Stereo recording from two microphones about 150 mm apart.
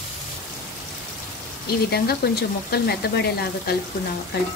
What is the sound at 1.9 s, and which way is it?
Speech, 90° left.